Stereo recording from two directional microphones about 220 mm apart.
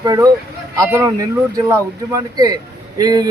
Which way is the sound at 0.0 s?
15° right (ahead or behind).